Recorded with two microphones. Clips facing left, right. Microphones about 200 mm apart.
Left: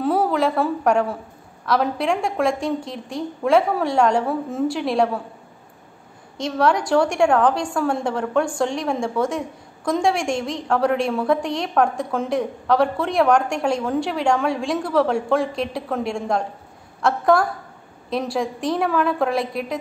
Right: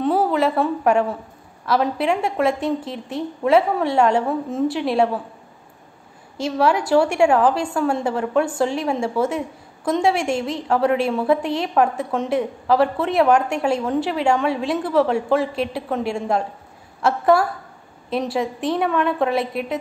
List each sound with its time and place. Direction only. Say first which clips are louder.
0.0 s a sound: right 1 dB; centre (ahead or behind)
1.7 s a woman's voice: right 1 dB; 5° right (ahead or behind)
6.3 s a woman's voice: right 1 dB; 5° right (ahead or behind)